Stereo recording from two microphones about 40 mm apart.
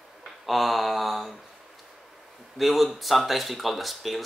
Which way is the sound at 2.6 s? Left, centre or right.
Centre.